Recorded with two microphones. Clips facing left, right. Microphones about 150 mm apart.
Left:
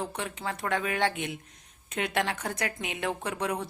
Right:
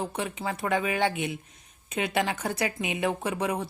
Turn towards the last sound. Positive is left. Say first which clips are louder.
# right 3 dB
turn(degrees=-5)  # may be behind; listen again after turning